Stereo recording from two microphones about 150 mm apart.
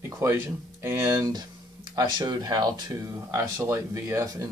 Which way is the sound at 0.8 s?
15° right (ahead or behind).